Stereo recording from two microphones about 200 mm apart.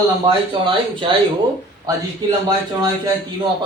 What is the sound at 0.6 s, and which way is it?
Speech, 25° right (ahead or behind).